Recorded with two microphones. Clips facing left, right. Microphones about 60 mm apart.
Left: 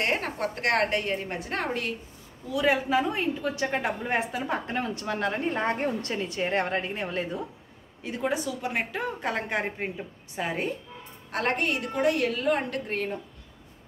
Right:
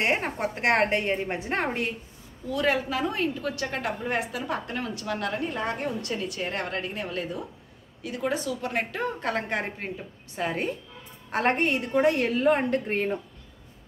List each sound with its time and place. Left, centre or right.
0.0 s a woman's voice: centre
2.5 s a woman's voice: centre
8.2 s a woman's voice: centre
11.3 s a woman's voice: right